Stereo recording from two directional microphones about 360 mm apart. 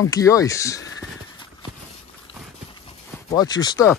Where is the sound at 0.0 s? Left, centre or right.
Centre.